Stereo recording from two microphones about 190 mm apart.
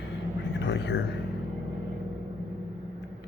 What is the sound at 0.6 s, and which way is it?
Speech, 65° left (ahead or behind).